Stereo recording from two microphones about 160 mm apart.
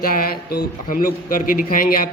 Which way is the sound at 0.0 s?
60° left (ahead or behind).